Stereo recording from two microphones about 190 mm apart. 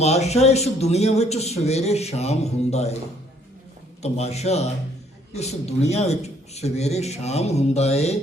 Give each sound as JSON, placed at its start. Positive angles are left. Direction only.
{"t": 0.0, "sound": "speech", "side_deg": 35}
{"t": 4.0, "sound": "speech", "side_deg": 35}